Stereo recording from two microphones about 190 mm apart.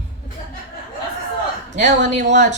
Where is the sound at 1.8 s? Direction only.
40° right (ahead or behind).